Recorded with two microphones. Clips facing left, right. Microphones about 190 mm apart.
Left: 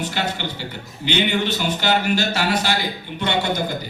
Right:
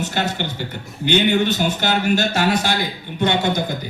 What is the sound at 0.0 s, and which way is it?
A man's voice, 50° right (ahead or behind).